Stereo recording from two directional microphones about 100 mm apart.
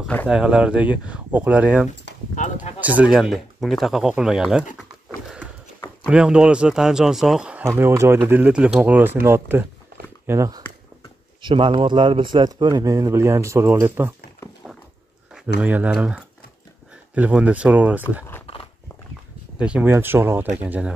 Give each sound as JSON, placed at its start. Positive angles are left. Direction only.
{"t": 0.3, "sound": "speech", "side_deg": -10}
{"t": 6.0, "sound": "speech", "side_deg": -10}
{"t": 7.6, "sound": "speech", "side_deg": -25}
{"t": 8.8, "sound": "speech", "side_deg": -20}
{"t": 11.4, "sound": "a man's voice", "side_deg": -55}
{"t": 15.3, "sound": "speech", "side_deg": -15}
{"t": 19.6, "sound": "speech", "side_deg": -10}
{"t": 19.9, "sound": "speech", "side_deg": -20}